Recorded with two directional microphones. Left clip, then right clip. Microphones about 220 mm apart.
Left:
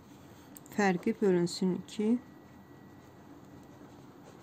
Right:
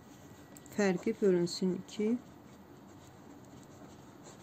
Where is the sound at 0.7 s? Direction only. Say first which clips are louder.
Left 2 dB; 15° left (ahead or behind).